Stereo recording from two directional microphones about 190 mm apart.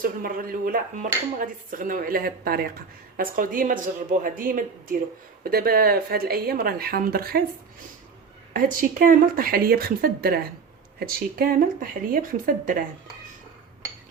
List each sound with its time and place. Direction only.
0.0 s speech: 50° right (ahead or behind)
8.5 s speech: 45° right (ahead or behind)